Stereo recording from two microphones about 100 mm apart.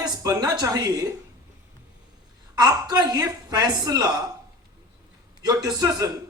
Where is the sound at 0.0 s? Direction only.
40° right (ahead or behind).